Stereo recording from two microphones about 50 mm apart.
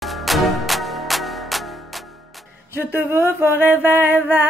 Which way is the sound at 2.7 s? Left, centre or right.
Right.